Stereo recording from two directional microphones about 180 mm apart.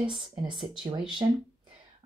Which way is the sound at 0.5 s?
5° right (ahead or behind).